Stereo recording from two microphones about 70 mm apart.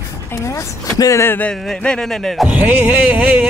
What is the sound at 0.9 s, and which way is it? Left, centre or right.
Speech, left.